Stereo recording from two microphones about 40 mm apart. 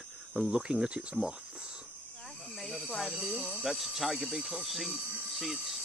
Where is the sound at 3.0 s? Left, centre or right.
Centre.